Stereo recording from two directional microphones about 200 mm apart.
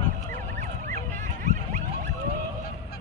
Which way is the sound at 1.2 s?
40° right (ahead or behind).